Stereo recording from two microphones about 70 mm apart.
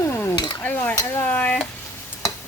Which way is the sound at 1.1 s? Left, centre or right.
Left.